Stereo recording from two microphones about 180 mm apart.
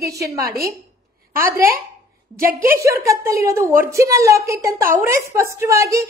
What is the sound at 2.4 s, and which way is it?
Speech, 50° right (ahead or behind).